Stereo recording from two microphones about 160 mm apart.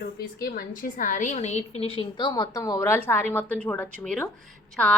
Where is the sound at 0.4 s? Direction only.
60° left (ahead or behind).